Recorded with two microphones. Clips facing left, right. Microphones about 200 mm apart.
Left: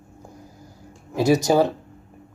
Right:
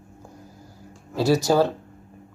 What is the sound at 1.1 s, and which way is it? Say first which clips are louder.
Speech: left 2 dB; 15° left (ahead or behind).